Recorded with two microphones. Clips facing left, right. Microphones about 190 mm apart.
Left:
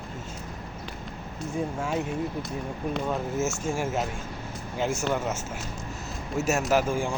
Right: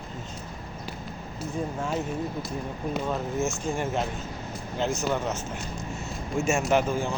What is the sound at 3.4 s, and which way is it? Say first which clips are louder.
Speech: even; 5° left (ahead or behind).